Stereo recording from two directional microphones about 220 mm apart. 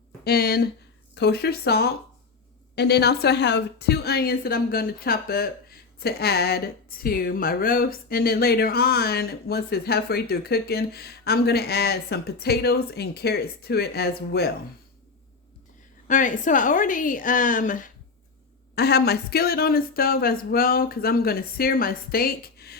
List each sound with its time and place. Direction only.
0.3 s speech: 45° left (ahead or behind)
16.0 s a woman's voice: 35° left (ahead or behind)
18.7 s speech: 45° left (ahead or behind)